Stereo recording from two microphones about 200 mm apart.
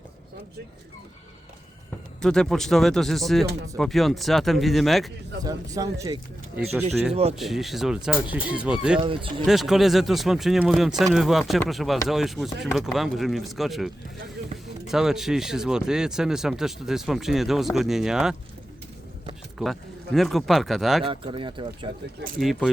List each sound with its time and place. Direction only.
2.2 s speech: 5° left (ahead or behind)
5.4 s speech: 20° right (ahead or behind)
7.1 s speech: 30° right (ahead or behind)
7.3 s speech: centre (ahead or behind)
9.0 s speech: 25° right (ahead or behind)
9.5 s speech: centre (ahead or behind)
20.1 s speech: centre (ahead or behind)
21.0 s speech: 25° right (ahead or behind)
22.4 s speech: centre (ahead or behind)